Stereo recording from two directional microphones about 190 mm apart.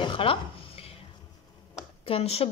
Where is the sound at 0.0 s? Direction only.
25° left (ahead or behind).